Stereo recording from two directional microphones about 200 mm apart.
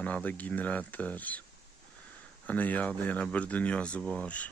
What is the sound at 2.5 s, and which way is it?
Speech, 10° left (ahead or behind).